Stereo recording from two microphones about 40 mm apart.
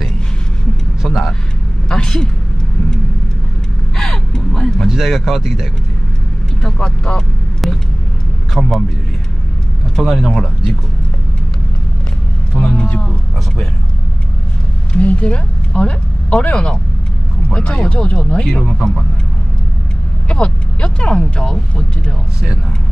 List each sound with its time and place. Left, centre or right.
1.0 s vehicle: centre
1.9 s a sound: centre
3.9 s vehicle: centre
4.8 s speech: centre
6.6 s speech: centre
7.6 s vehicle: centre
8.6 s speech: centre
9.9 s speech: centre
12.5 s a sound: left
14.9 s vehicle: left
17.5 s speech: left
18.5 s speech: centre
20.2 s speech: left